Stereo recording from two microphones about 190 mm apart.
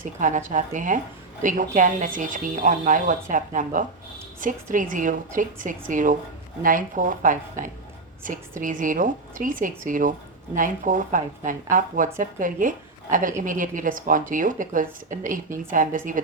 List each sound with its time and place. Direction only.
0.0 s a woman's voice: 40° right (ahead or behind)